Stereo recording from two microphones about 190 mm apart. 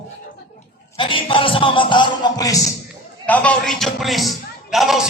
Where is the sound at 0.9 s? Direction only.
25° left (ahead or behind).